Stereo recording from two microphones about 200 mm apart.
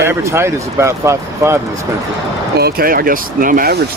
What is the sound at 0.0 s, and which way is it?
Speech, 15° right (ahead or behind).